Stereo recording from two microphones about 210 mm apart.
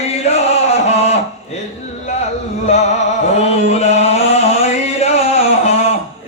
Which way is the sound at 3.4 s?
30° left (ahead or behind).